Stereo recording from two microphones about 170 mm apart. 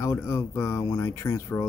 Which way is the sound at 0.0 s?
15° left (ahead or behind).